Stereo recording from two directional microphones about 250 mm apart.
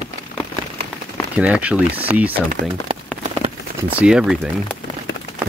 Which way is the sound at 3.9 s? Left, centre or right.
Centre.